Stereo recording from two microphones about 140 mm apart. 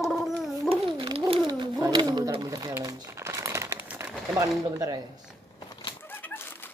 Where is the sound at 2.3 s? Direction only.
25° right (ahead or behind).